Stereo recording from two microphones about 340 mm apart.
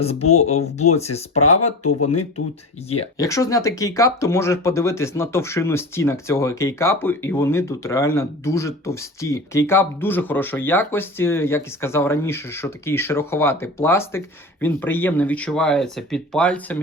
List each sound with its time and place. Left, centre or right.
0.0 s speech: centre
3.0 s speech: centre